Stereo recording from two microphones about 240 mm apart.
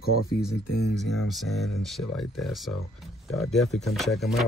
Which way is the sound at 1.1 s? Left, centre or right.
Centre.